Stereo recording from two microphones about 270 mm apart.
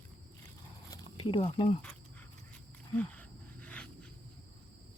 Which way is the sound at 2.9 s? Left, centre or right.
Centre.